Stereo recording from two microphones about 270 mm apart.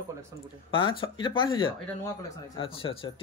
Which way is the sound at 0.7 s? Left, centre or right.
Centre.